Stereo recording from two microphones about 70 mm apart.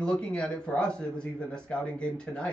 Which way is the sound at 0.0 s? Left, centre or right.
Centre.